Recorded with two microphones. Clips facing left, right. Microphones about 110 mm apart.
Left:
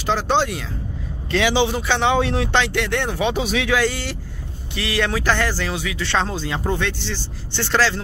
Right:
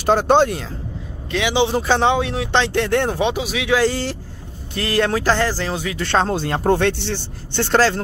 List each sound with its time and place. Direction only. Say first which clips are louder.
0.0 s speech: right 5 dB; 50° right (ahead or behind)
1.3 s a man's voice: even; 20° right (ahead or behind)
1.7 s speech: right 3 dB; 40° right (ahead or behind)
2.1 s a man's voice: left 2 dB; 5° right (ahead or behind)
2.5 s speech: right 7 dB; 30° right (ahead or behind)
3.3 s a man's voice: left 2 dB; 10° right (ahead or behind)
3.7 s speech: right 7 dB; 35° right (ahead or behind)
6.3 s speech: right 6 dB; 55° right (ahead or behind)